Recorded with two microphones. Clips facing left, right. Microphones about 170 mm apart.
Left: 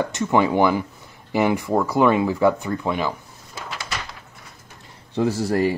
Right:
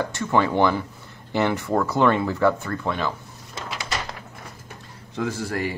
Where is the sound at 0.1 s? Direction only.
15° left (ahead or behind).